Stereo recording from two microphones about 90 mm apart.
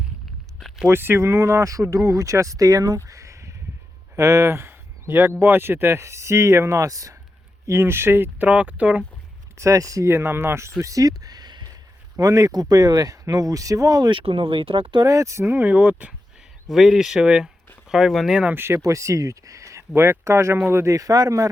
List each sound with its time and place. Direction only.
0.9 s speech: 25° right (ahead or behind)
7.7 s speech: 25° right (ahead or behind)
8.4 s speech: 15° right (ahead or behind)
9.6 s speech: 35° right (ahead or behind)
12.1 s speech: 40° right (ahead or behind)
14.1 s speech: 75° right (ahead or behind)
15.0 s speech: 35° right (ahead or behind)
15.6 s speech: 15° right (ahead or behind)
16.6 s speech: 5° right (ahead or behind)
18.5 s speech: 25° right (ahead or behind)